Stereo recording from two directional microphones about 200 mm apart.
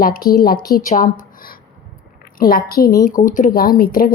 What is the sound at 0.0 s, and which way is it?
A woman's voice, 45° left (ahead or behind).